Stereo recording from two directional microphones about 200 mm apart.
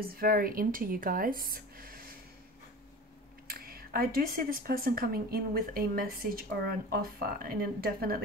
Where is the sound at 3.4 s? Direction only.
50° right (ahead or behind).